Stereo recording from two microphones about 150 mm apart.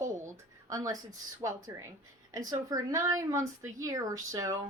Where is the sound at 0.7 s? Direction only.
20° right (ahead or behind).